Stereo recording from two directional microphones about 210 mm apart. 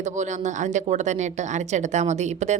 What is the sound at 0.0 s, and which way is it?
A woman's voice, 35° right (ahead or behind).